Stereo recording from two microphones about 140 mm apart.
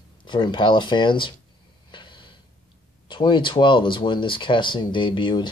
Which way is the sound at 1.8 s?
35° left (ahead or behind).